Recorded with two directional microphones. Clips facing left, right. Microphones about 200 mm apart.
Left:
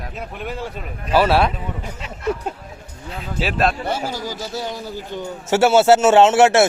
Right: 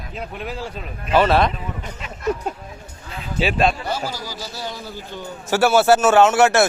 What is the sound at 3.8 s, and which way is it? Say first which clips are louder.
A man's voice: left 2 dB; 25° left (ahead or behind).